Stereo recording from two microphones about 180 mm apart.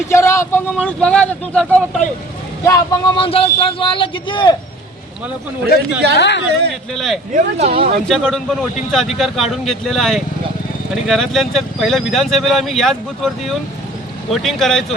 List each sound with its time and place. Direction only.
0.1 s speech: 15° left (ahead or behind)
2.6 s speech: 15° left (ahead or behind)
3.2 s a man's voice: 30° left (ahead or behind)
5.7 s speech: 60° left (ahead or behind)
6.1 s speech: 75° left (ahead or behind)
6.9 s speech: centre (ahead or behind)
7.3 s speech: 35° right (ahead or behind)
8.0 s speech: 5° left (ahead or behind)